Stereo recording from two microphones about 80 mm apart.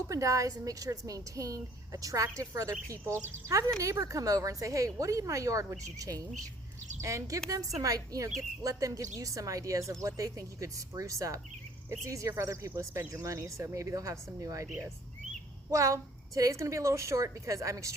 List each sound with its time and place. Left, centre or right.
0.1 s a woman's voice: right
3.8 s a woman's voice: right
15.7 s a woman's voice: right